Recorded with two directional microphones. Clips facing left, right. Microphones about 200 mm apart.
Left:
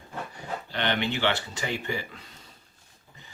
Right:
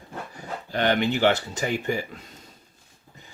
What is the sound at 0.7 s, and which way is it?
Speech, 45° right (ahead or behind).